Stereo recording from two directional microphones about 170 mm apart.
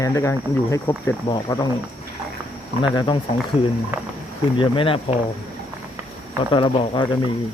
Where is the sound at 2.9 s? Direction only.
30° left (ahead or behind).